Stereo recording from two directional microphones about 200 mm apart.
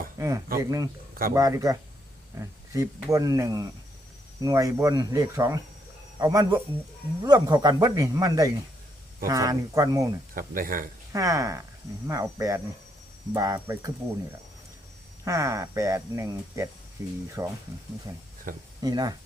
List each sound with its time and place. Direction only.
0.2 s speech: 15° right (ahead or behind)
10.3 s speech: 45° right (ahead or behind)
11.1 s speech: 15° right (ahead or behind)
15.2 s speech: 15° right (ahead or behind)
18.5 s speech: 45° right (ahead or behind)
18.8 s speech: 20° right (ahead or behind)